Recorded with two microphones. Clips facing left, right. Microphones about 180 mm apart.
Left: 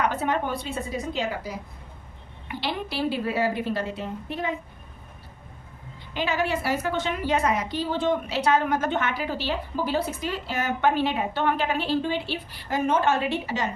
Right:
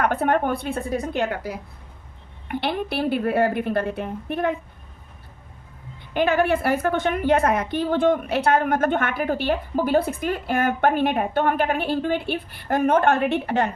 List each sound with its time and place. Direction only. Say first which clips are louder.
0.0 s a woman's voice: right 5 dB; 55° right (ahead or behind)
6.1 s a woman's voice: right 6 dB; 55° right (ahead or behind)